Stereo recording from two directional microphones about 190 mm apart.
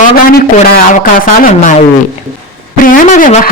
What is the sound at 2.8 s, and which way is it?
Speech, 45° left (ahead or behind).